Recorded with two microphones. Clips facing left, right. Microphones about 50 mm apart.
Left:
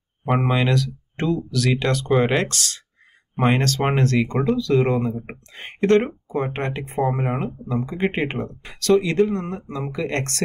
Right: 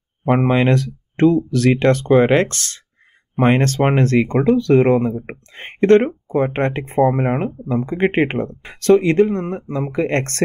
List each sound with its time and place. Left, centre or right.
0.4 s speech: right